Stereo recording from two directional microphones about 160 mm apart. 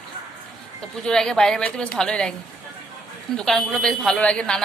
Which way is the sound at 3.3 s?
5° left (ahead or behind).